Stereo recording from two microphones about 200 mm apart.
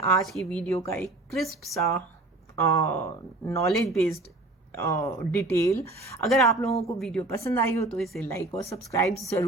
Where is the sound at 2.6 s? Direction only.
15° left (ahead or behind).